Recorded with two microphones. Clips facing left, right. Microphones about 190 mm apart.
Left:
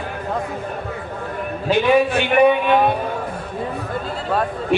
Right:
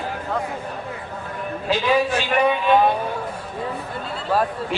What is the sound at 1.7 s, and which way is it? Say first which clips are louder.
Speech: left 4 dB; 60° left (ahead or behind).